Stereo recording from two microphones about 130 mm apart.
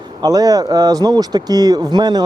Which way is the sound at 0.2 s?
30° right (ahead or behind).